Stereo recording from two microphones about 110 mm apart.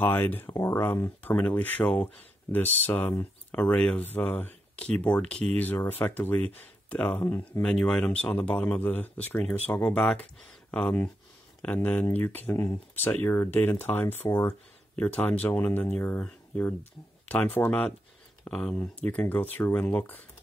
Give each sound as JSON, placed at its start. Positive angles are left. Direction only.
{"t": 0.0, "sound": "speech", "side_deg": 20}